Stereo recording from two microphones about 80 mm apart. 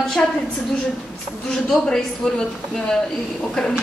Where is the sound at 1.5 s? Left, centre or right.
Centre.